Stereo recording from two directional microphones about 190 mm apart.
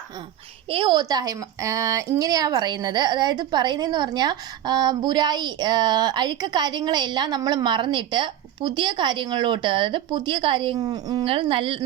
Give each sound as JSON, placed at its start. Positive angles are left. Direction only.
{"t": 0.7, "sound": "a woman's voice", "side_deg": -25}